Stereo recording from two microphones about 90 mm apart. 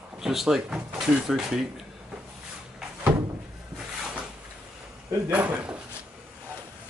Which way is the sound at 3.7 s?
5° right (ahead or behind).